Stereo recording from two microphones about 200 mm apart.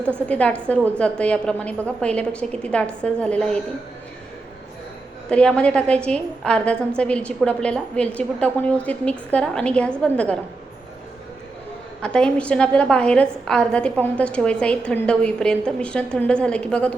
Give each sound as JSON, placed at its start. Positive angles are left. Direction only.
{"t": 0.3, "sound": "a woman's voice", "side_deg": 5}
{"t": 5.3, "sound": "a woman's voice", "side_deg": 5}
{"t": 12.0, "sound": "a woman's voice", "side_deg": 5}